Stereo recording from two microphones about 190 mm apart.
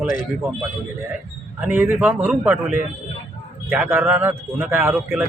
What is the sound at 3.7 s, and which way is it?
A man's voice, 10° right (ahead or behind).